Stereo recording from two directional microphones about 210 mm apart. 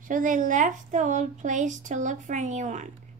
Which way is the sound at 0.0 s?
40° right (ahead or behind).